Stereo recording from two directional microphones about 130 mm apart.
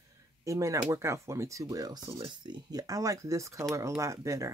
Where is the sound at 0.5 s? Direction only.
25° right (ahead or behind).